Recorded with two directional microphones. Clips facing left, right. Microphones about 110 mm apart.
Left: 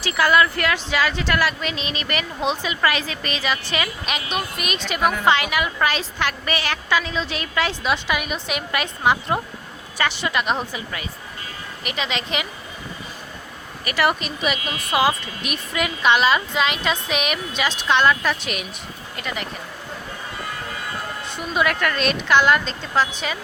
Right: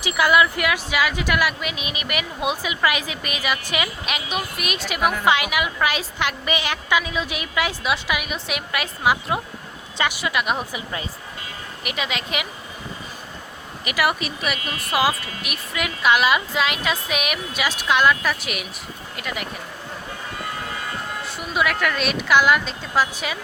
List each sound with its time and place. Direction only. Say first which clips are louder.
0.0 s a woman's voice: even; 15° right (ahead or behind)
11.8 s a woman's voice: left 1 dB; 5° right (ahead or behind)
13.8 s a woman's voice: left 1 dB; 10° right (ahead or behind)
21.2 s a woman's voice: left 1 dB; 5° right (ahead or behind)